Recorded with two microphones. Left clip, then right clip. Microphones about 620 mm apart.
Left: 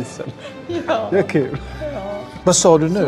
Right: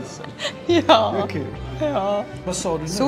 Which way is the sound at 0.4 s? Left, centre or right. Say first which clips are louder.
Right 9 dB; right.